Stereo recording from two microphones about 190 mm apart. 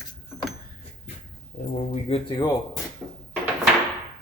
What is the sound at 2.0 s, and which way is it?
Speech, 30° left (ahead or behind).